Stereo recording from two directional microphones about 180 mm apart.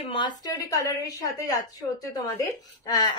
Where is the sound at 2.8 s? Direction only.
20° left (ahead or behind).